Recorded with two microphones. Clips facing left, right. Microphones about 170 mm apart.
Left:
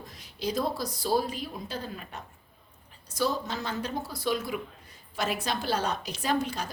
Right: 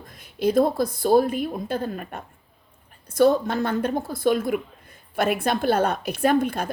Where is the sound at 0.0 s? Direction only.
50° right (ahead or behind).